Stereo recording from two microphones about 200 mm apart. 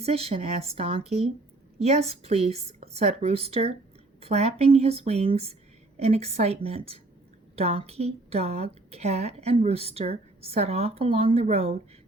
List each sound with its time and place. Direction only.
0.0 s a woman's voice: 30° right (ahead or behind)